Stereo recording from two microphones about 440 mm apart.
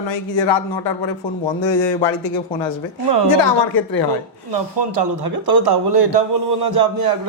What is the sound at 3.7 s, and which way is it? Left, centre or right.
Speech, left.